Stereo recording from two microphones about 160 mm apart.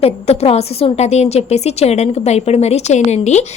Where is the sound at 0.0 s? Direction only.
40° left (ahead or behind).